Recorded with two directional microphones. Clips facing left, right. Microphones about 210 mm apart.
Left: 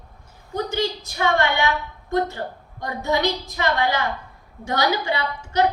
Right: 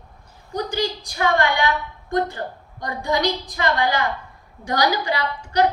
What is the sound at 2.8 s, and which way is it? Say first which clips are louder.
A woman's voice: even; 25° left (ahead or behind).